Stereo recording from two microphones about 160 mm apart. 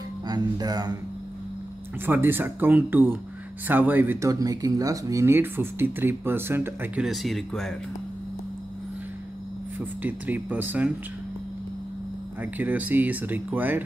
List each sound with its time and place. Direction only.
0.3 s speech: 25° right (ahead or behind)
2.0 s speech: 15° right (ahead or behind)
7.1 s speech: centre (ahead or behind)
9.8 s speech: 10° right (ahead or behind)
12.4 s speech: 10° right (ahead or behind)